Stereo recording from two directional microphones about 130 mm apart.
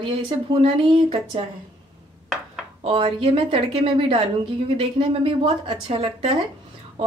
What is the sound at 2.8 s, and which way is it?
A woman's voice, 45° right (ahead or behind).